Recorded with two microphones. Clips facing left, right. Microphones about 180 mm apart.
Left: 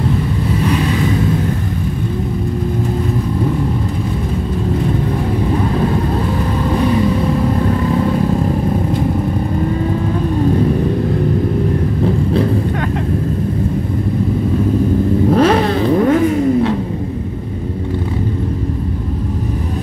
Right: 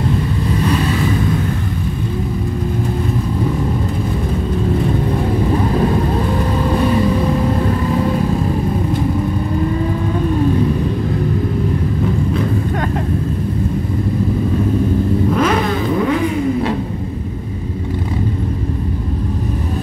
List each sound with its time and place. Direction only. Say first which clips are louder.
15.2 s vehicle: left 6 dB; 35° left (ahead or behind)